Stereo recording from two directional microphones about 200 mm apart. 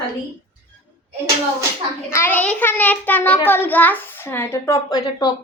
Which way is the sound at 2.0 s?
10° left (ahead or behind).